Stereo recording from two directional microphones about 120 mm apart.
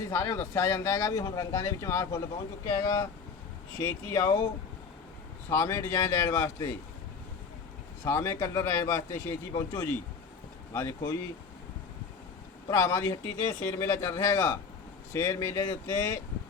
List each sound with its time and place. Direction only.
0.1 s speech: 25° left (ahead or behind)
5.5 s speech: 25° left (ahead or behind)
8.0 s speech: 25° left (ahead or behind)
12.6 s speech: 25° left (ahead or behind)